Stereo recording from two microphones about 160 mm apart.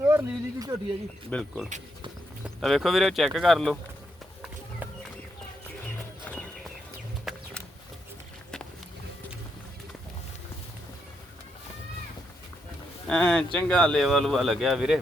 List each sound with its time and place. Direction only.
0.0 s speech: 15° right (ahead or behind)
1.3 s speech: centre (ahead or behind)
6.3 s horse: 10° left (ahead or behind)
7.3 s a sound: centre (ahead or behind)
13.1 s speech: 5° left (ahead or behind)